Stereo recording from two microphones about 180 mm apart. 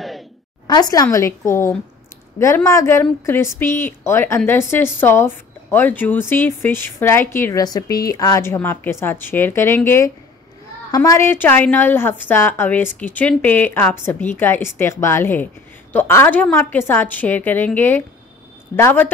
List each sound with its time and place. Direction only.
0.7 s a woman's voice: 20° left (ahead or behind)